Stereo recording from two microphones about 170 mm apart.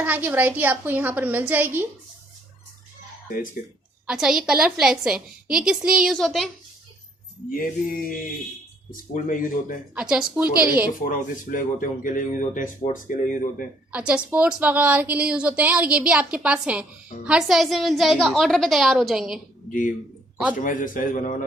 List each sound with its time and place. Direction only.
0.0 s a woman's voice: 10° right (ahead or behind)
3.6 s speech: 60° left (ahead or behind)
4.0 s a woman's voice: 5° right (ahead or behind)
9.1 s speech: 50° left (ahead or behind)
9.9 s a woman's voice: 5° right (ahead or behind)
11.0 s speech: 55° left (ahead or behind)
13.9 s a woman's voice: 10° right (ahead or behind)
20.6 s speech: 50° left (ahead or behind)